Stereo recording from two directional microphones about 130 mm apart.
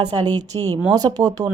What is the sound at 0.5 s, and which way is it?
Speech, 40° right (ahead or behind).